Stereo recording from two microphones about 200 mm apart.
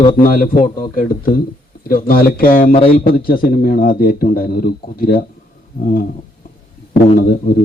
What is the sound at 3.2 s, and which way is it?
A man's voice, 45° left (ahead or behind).